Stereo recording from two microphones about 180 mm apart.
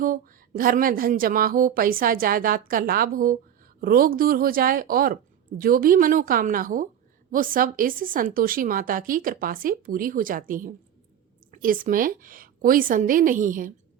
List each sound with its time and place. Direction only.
0.0 s a woman's voice: 50° right (ahead or behind)